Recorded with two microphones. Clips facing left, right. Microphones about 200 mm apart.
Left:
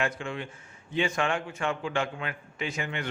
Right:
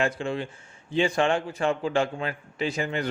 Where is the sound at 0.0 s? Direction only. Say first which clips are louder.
Right 5 dB; 30° right (ahead or behind).